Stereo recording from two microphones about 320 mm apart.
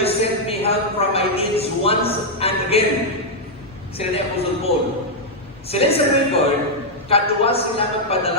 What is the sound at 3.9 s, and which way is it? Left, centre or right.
Speech, centre.